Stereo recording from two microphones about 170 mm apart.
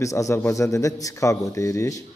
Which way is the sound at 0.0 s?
15° left (ahead or behind).